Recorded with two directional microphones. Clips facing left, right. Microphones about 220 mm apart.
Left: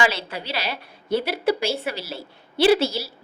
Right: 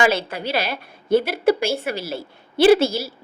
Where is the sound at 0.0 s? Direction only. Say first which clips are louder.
Right 5 dB; 50° right (ahead or behind).